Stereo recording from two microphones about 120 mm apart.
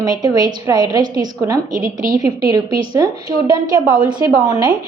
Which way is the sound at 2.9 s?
30° right (ahead or behind).